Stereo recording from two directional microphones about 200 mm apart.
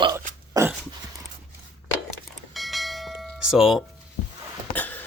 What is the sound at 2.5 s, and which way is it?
Bell, centre (ahead or behind).